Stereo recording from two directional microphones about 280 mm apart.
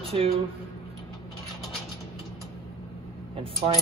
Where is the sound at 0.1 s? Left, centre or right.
Right.